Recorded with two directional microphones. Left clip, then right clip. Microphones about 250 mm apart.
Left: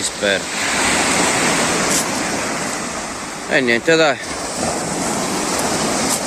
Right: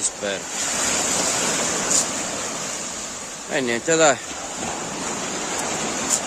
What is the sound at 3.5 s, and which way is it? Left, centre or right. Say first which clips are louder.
Speech: left 7 dB; centre.